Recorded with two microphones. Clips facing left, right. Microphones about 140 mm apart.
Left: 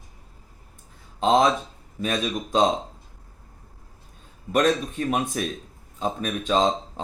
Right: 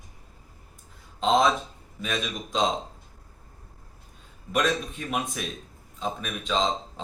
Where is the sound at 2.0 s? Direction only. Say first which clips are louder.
Left 5 dB; 40° left (ahead or behind).